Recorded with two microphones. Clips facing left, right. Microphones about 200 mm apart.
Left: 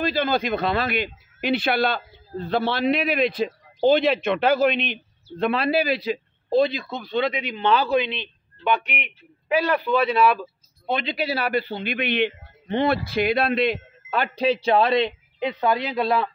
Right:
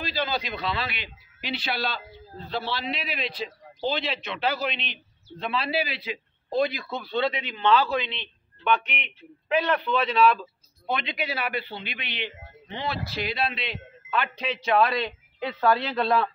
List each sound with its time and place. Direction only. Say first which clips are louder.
0.0 s a man's voice: left 7 dB; 50° left (ahead or behind)
6.5 s speech: left 5 dB; 25° left (ahead or behind)
10.9 s a man's voice: left 5 dB; 30° left (ahead or behind); by 16.3 s 10° left (ahead or behind)